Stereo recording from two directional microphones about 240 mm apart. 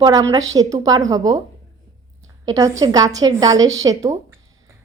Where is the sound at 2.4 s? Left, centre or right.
Centre.